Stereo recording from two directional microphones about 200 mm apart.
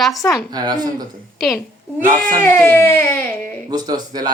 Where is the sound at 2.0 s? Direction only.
40° right (ahead or behind).